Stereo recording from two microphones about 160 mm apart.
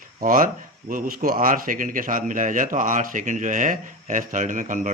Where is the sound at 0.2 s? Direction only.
60° right (ahead or behind).